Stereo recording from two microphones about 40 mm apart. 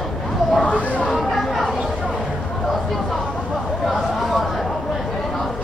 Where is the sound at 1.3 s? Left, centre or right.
Centre.